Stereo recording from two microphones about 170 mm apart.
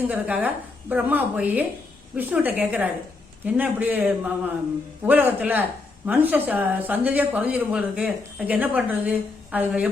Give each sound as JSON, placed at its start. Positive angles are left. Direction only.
{"t": 0.1, "sound": "speech", "side_deg": -10}